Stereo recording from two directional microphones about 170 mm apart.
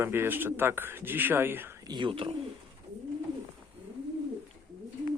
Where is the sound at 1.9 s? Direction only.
30° right (ahead or behind).